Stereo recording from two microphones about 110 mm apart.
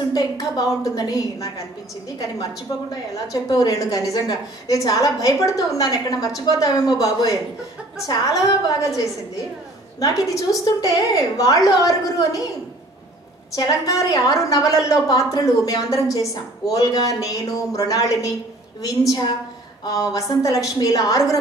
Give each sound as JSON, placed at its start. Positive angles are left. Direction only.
{"t": 0.1, "sound": "a woman's voice", "side_deg": 35}
{"t": 2.7, "sound": "a woman's voice", "side_deg": 35}
{"t": 13.6, "sound": "a woman's voice", "side_deg": 35}